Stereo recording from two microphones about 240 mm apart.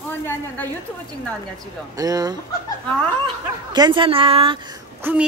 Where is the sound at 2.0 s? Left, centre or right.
Centre.